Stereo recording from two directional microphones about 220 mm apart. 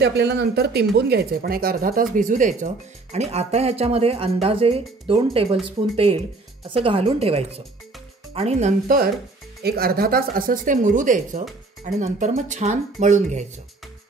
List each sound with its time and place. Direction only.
0.0 s speech: 50° right (ahead or behind); by 13.5 s 30° right (ahead or behind)